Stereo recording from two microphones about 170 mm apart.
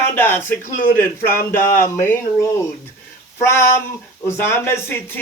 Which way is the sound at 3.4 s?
15° left (ahead or behind).